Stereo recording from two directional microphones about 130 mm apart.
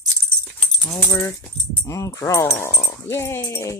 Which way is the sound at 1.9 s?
25° left (ahead or behind).